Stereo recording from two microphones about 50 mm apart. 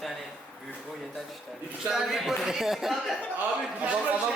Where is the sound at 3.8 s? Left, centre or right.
Right.